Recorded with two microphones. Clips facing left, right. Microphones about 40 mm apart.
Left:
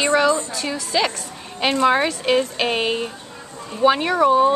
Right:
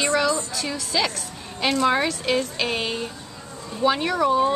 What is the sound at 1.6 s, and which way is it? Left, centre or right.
A woman's voice, left.